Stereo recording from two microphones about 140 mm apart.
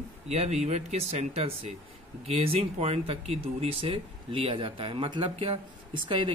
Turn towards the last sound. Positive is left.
turn(degrees=-40)  # may be behind; listen again after turning